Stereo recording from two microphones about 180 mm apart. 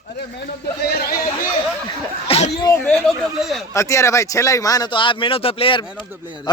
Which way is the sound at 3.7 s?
15° left (ahead or behind).